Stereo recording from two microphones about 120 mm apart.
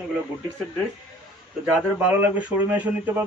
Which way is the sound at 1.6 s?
10° right (ahead or behind).